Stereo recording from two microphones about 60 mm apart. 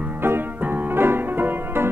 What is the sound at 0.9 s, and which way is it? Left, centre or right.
Music, right.